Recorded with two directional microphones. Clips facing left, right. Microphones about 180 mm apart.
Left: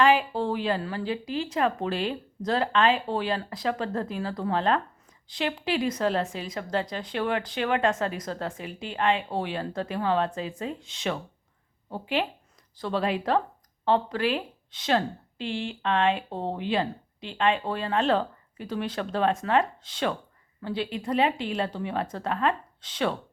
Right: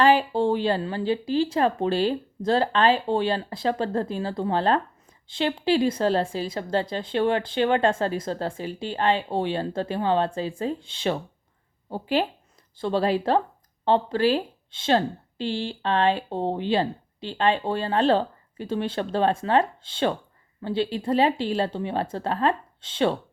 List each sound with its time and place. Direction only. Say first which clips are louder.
0.0 s speech: right 3 dB; 35° right (ahead or behind)